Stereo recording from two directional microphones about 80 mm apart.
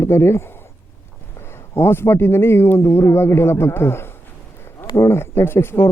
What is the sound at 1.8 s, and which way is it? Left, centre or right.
Speech, left.